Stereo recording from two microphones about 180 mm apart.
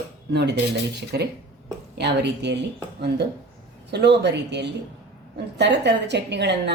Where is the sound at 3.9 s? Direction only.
70° right (ahead or behind).